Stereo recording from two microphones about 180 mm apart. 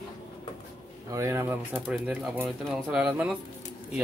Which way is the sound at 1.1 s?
15° right (ahead or behind).